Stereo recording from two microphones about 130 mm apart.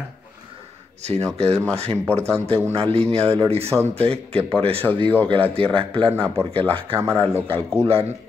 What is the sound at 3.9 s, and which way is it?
Speech, 50° right (ahead or behind).